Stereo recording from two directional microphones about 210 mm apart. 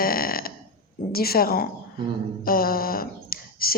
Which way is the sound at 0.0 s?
45° left (ahead or behind).